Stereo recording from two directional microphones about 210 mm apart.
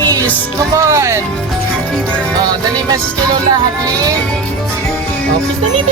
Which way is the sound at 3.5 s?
15° right (ahead or behind).